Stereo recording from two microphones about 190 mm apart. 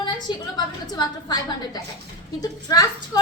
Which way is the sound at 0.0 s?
20° left (ahead or behind).